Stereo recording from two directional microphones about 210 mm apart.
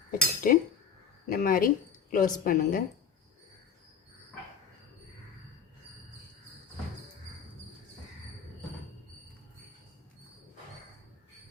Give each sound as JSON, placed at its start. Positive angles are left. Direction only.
{"t": 0.1, "sound": "a woman's voice", "side_deg": 40}